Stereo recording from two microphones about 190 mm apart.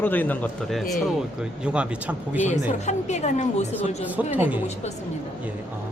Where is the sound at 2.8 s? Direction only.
35° left (ahead or behind).